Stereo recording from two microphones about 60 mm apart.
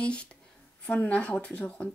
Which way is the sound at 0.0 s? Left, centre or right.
Centre.